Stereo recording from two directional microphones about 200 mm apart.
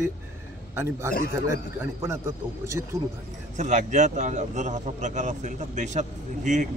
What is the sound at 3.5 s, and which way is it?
A man's voice, 35° right (ahead or behind).